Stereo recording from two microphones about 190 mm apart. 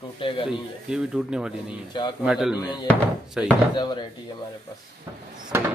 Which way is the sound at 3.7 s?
25° left (ahead or behind).